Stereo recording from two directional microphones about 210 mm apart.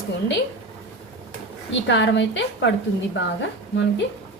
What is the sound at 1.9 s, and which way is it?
Speech, 60° left (ahead or behind).